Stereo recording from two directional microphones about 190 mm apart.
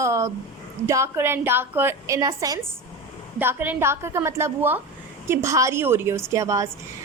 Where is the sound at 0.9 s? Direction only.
15° right (ahead or behind).